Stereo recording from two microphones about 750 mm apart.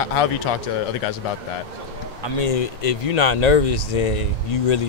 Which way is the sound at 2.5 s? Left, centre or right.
Left.